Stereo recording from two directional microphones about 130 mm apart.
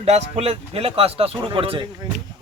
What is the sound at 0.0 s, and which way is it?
Speech, 55° right (ahead or behind).